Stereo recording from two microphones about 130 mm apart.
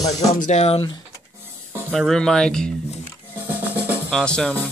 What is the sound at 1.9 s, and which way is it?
Speech, 5° left (ahead or behind).